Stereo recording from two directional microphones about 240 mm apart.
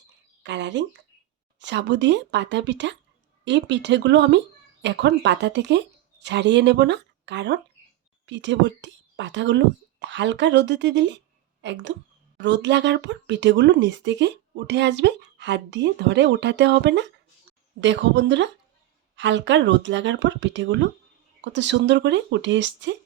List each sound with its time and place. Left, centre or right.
0.4 s speech: right